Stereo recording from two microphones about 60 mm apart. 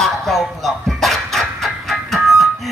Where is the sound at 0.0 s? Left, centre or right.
Centre.